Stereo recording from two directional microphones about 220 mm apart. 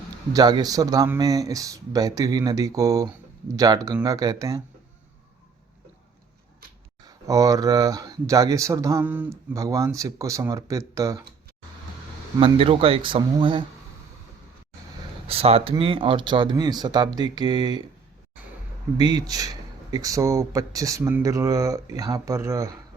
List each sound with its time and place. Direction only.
0.3 s speech: 20° right (ahead or behind)
7.0 s speech: 15° right (ahead or behind)
12.4 s speech: 25° right (ahead or behind)
15.3 s speech: 25° right (ahead or behind)
18.9 s speech: 20° right (ahead or behind)